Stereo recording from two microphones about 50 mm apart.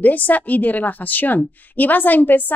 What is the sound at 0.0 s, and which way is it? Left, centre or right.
Speech, left.